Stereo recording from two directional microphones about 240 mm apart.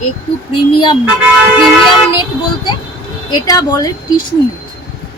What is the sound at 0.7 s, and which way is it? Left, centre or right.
Speech, centre.